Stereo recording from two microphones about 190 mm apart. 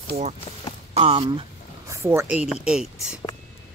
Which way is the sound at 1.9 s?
15° right (ahead or behind).